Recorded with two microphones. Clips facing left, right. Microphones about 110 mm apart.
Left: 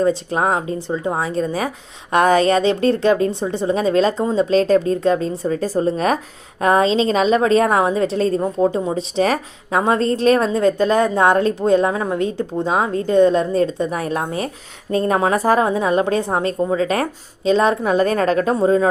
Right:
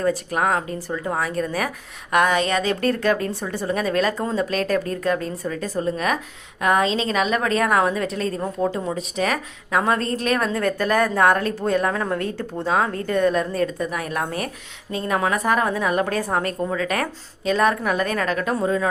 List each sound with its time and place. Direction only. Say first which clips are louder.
0.0 s a woman's voice: left 4 dB; 25° left (ahead or behind)